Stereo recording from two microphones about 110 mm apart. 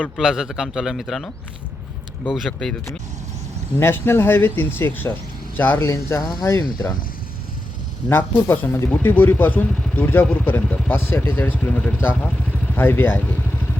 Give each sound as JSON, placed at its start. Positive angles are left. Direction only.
{"t": 0.2, "sound": "a man's voice", "side_deg": -5}
{"t": 2.3, "sound": "a man's voice", "side_deg": 0}
{"t": 3.8, "sound": "speech", "side_deg": 20}
{"t": 6.6, "sound": "speech", "side_deg": 35}
{"t": 8.1, "sound": "speech", "side_deg": 20}